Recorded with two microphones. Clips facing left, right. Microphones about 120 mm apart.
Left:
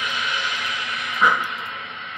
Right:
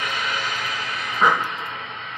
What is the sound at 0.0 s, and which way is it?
Vehicle, 45° right (ahead or behind).